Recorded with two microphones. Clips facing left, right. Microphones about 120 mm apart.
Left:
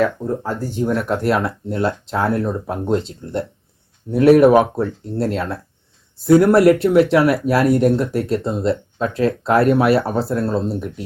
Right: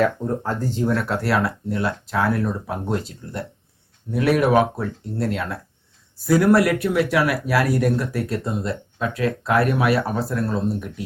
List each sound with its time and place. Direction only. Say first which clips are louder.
0.4 s speech: left 1 dB; 15° left (ahead or behind)